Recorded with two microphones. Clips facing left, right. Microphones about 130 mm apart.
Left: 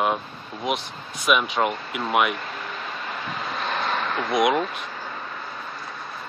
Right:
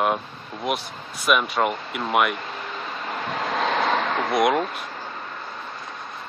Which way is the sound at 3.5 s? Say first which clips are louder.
Right 5 dB; 90° right.